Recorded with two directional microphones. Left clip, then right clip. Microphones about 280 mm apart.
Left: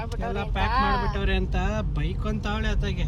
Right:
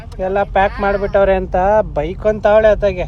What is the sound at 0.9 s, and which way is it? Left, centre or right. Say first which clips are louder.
Speech: right 14 dB; centre.